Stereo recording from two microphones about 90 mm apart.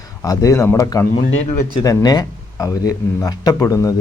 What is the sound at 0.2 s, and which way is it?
Speech, 40° left (ahead or behind).